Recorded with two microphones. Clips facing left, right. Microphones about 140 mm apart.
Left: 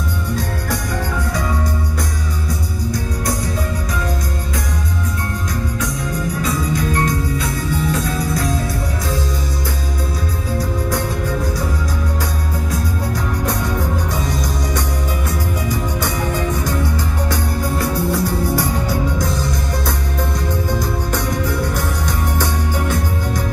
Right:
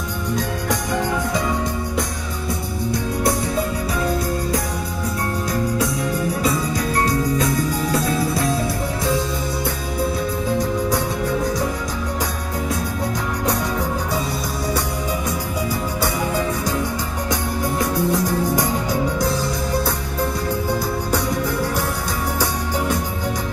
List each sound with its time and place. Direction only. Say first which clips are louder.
6.4 s music: left 1 dB; 35° right (ahead or behind)
15.7 s music: even; 10° right (ahead or behind)